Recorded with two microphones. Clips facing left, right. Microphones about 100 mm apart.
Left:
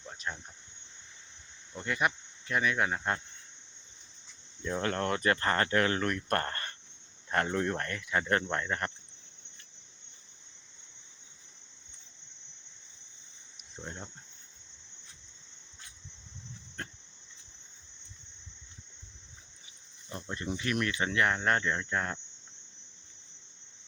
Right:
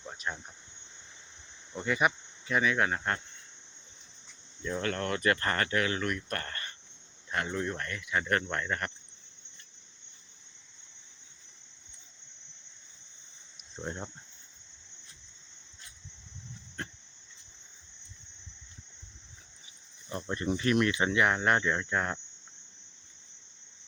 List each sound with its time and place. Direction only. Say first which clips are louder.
0.2 s speech: right 2 dB; 5° right (ahead or behind)
1.8 s speech: right 3 dB; 5° right (ahead or behind)
4.6 s speech: left 1 dB; 25° left (ahead or behind)
5.6 s speech: left 2 dB; 40° left (ahead or behind)
8.3 s speech: even; 25° left (ahead or behind)
13.8 s a sound: right 5 dB; 30° right (ahead or behind)
16.8 s insect: right 2 dB; centre (ahead or behind)
20.3 s speech: right 5 dB; 50° right (ahead or behind)
20.7 s speech: right 5 dB; 25° right (ahead or behind); by 22.2 s 5° right (ahead or behind)